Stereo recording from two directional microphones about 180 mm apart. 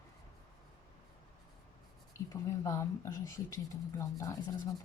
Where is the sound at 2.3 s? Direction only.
15° left (ahead or behind).